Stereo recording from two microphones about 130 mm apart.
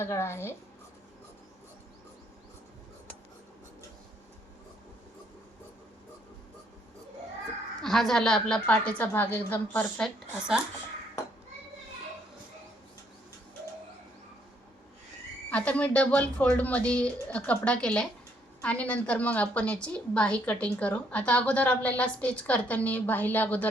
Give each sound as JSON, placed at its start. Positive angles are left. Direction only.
{"t": 0.0, "sound": "speech", "side_deg": 20}
{"t": 7.8, "sound": "a woman's voice", "side_deg": 5}
{"t": 15.4, "sound": "a woman's voice", "side_deg": 10}